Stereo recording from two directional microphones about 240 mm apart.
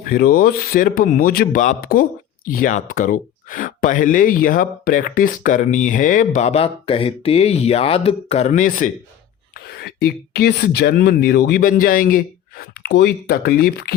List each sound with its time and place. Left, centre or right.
0.1 s a man's voice: left
9.6 s a sound: left
10.3 s a man's voice: left